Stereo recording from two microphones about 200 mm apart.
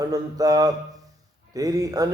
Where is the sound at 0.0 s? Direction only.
20° right (ahead or behind).